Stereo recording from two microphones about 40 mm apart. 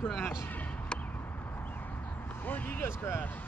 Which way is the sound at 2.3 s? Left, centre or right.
Left.